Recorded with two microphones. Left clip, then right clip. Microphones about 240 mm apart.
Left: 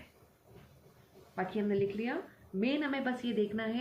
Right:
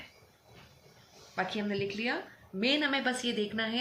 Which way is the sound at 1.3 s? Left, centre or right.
Centre.